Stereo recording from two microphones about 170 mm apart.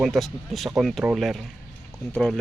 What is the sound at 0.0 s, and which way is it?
Speech, centre (ahead or behind).